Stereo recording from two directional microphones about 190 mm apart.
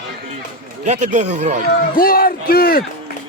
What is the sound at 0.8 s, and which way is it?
Speech, 40° right (ahead or behind).